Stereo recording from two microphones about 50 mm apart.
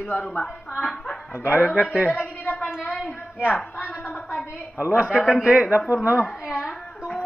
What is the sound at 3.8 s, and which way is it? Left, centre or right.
Speech, left.